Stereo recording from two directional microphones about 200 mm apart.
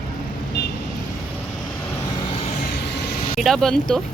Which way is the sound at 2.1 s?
25° left (ahead or behind).